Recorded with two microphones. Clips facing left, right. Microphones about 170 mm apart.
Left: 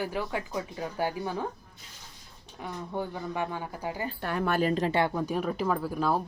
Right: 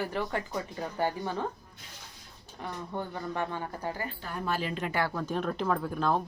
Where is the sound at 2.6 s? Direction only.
5° left (ahead or behind).